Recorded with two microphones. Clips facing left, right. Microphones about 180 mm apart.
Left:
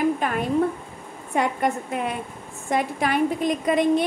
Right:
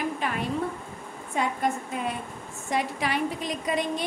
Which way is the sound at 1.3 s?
65° left (ahead or behind).